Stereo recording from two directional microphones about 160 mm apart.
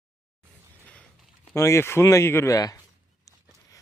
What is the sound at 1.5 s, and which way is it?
Speech, 20° left (ahead or behind).